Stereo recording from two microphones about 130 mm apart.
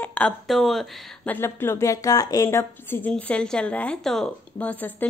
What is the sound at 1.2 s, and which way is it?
A woman's voice, 20° left (ahead or behind).